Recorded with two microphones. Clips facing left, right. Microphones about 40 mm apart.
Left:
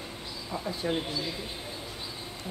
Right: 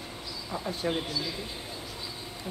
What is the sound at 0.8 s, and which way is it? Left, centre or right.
Speech, right.